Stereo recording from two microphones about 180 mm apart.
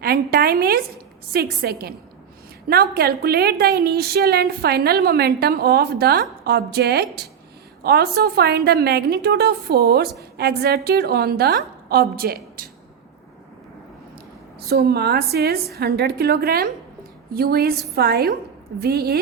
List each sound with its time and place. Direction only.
0.0 s a woman's voice: 60° right (ahead or behind)
14.6 s a woman's voice: 60° right (ahead or behind)